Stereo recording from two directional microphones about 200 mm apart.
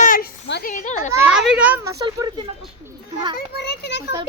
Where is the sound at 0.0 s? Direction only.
45° left (ahead or behind).